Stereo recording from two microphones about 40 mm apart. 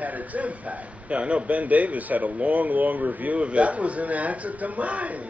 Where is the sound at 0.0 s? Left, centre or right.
Right.